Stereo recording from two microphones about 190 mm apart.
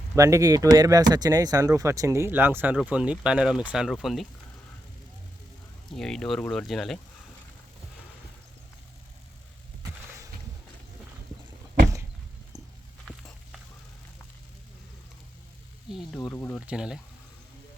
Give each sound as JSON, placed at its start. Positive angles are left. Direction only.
{"t": 0.2, "sound": "speech", "side_deg": -15}
{"t": 5.9, "sound": "speech", "side_deg": 0}
{"t": 12.5, "sound": "a sound", "side_deg": -20}
{"t": 13.1, "sound": "a sound", "side_deg": 0}
{"t": 15.9, "sound": "speech", "side_deg": 0}
{"t": 16.6, "sound": "speech", "side_deg": -5}